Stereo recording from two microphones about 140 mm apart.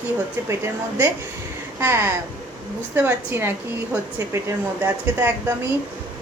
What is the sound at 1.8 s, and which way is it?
Speech, 20° right (ahead or behind).